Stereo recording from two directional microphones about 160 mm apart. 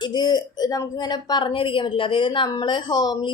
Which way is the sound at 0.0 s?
25° left (ahead or behind).